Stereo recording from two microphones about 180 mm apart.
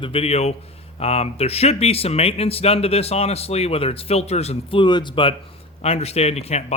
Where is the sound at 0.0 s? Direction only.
30° left (ahead or behind).